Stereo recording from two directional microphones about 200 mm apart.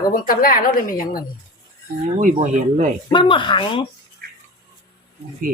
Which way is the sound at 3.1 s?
25° left (ahead or behind).